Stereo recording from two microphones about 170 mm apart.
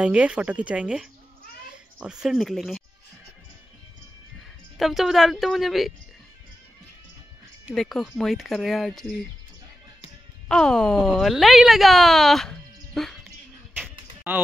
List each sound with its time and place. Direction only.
0.0 s speech: 5° right (ahead or behind)
4.7 s speech: centre (ahead or behind)
7.7 s speech: centre (ahead or behind)
10.5 s speech: 5° left (ahead or behind)
14.3 s speech: 10° right (ahead or behind)